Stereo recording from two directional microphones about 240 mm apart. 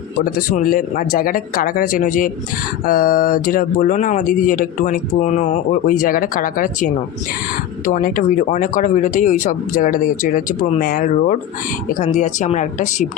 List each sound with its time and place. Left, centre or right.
0.3 s speech: left